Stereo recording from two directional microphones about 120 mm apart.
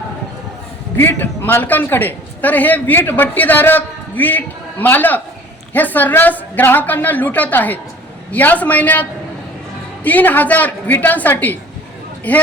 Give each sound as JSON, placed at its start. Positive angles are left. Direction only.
{"t": 0.9, "sound": "a man's voice", "side_deg": 20}